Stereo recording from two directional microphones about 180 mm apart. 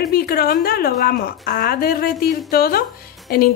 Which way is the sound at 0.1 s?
60° left (ahead or behind).